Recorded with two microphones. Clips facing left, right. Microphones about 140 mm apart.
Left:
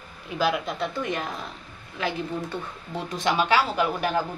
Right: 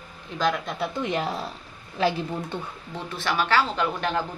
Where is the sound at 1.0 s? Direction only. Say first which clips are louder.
Right 3 dB; 25° right (ahead or behind).